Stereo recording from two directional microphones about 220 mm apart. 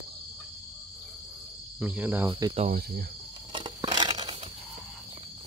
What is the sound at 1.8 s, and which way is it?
Cricket, 5° right (ahead or behind).